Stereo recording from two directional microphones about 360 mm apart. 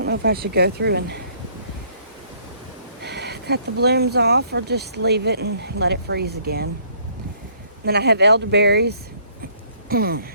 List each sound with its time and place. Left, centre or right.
0.0 s speech: right
3.0 s speech: right
7.9 s speech: right